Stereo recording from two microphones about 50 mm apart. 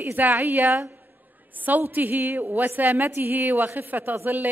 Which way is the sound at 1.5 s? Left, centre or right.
Right.